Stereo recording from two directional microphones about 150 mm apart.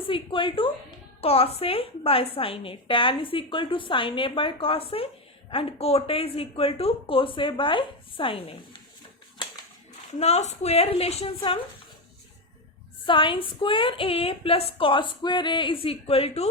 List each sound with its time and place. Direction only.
0.1 s a woman's voice: 35° left (ahead or behind)
10.2 s a woman's voice: 45° left (ahead or behind)
13.1 s a woman's voice: 35° left (ahead or behind)